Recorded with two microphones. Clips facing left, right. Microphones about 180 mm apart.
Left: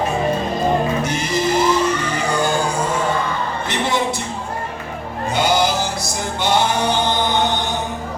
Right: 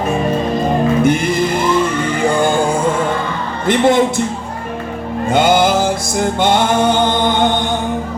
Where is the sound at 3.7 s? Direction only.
50° right (ahead or behind).